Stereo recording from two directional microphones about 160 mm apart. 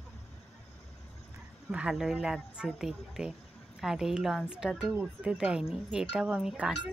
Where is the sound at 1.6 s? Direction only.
5° right (ahead or behind).